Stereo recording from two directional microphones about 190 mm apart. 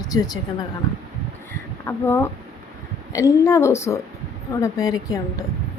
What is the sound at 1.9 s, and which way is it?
A woman's voice, 10° left (ahead or behind).